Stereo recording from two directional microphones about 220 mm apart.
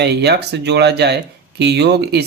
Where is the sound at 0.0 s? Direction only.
50° right (ahead or behind).